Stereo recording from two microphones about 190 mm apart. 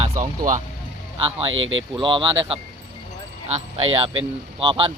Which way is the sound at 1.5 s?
90° right.